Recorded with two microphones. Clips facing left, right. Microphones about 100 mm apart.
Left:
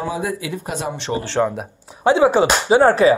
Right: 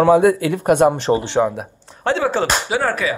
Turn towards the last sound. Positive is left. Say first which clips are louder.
# left 7 dB
turn(degrees=30)  # may be behind; listen again after turning